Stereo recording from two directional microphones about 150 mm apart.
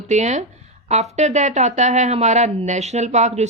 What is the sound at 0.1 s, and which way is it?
A woman's voice, 50° right (ahead or behind).